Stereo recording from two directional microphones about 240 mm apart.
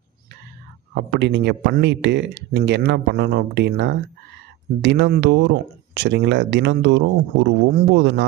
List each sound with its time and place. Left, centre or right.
0.9 s speech: right